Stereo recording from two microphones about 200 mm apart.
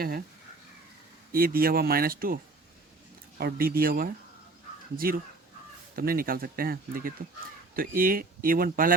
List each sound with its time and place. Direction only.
1.3 s speech: 45° right (ahead or behind)